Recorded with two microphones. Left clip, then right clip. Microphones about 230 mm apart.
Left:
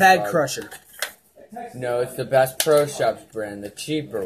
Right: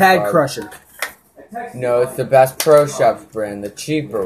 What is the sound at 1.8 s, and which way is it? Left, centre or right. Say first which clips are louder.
Speech: right 8 dB; left.